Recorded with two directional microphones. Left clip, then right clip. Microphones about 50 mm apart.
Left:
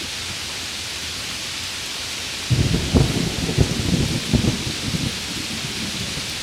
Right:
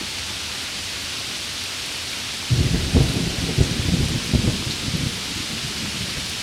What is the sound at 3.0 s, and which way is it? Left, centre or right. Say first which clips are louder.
Thunder: left 2 dB; centre.